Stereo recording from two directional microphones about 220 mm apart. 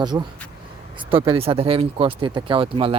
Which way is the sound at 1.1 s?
25° right (ahead or behind).